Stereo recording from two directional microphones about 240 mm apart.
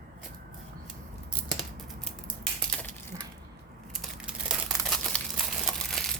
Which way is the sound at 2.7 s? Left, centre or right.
Centre.